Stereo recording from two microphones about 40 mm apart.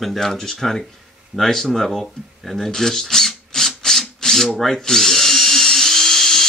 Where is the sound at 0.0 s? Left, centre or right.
Centre.